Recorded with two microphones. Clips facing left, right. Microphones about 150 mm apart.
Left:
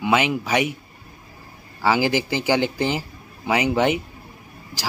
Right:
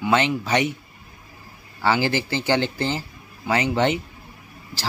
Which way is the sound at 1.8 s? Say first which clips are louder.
Left 2 dB; 15° left (ahead or behind).